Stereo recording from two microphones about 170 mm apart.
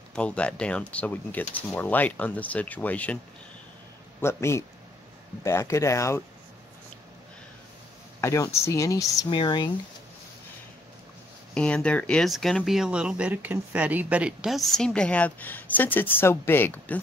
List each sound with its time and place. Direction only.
0.1 s speech: 5° left (ahead or behind)
4.2 s speech: 15° left (ahead or behind)
8.2 s speech: 15° left (ahead or behind)
11.5 s speech: 5° left (ahead or behind)